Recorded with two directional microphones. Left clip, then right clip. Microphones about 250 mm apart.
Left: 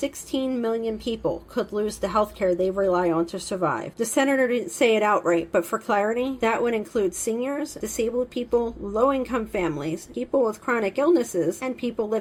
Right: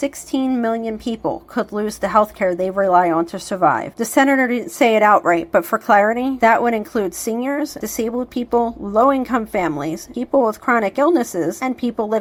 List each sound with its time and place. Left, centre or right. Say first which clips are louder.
0.3 s a woman's voice: right 6 dB; centre